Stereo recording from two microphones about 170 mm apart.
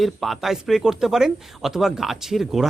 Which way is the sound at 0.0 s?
Centre (ahead or behind).